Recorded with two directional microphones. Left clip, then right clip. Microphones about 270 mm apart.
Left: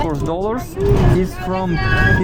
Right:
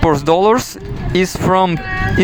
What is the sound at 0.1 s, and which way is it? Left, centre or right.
Speech, right.